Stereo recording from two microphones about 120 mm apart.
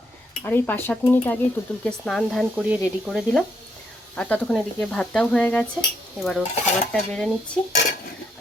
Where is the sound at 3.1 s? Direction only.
5° left (ahead or behind).